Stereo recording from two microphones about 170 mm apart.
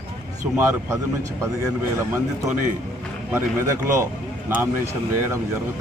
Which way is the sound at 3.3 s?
15° right (ahead or behind).